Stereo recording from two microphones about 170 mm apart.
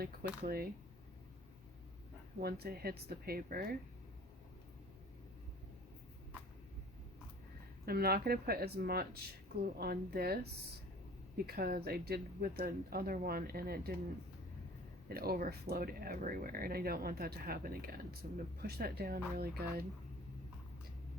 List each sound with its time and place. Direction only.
0.4 s speech: 65° right (ahead or behind)
2.4 s speech: 65° right (ahead or behind)
7.9 s speech: 65° right (ahead or behind)
11.4 s speech: 65° right (ahead or behind)
15.1 s speech: 65° right (ahead or behind)